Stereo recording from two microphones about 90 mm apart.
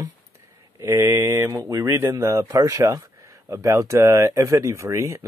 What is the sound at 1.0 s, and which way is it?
Speech, 35° right (ahead or behind).